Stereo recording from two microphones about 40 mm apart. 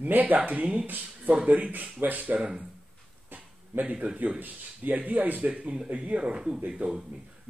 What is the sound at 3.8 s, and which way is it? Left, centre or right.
Speech, right.